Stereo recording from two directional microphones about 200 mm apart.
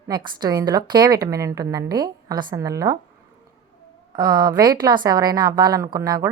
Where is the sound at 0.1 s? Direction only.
20° right (ahead or behind).